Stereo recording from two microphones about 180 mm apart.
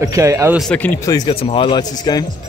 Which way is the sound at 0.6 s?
5° left (ahead or behind).